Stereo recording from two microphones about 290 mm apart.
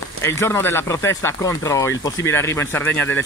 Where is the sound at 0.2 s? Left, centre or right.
Centre.